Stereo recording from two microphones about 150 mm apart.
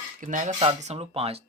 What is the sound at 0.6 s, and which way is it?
Speech, 40° right (ahead or behind).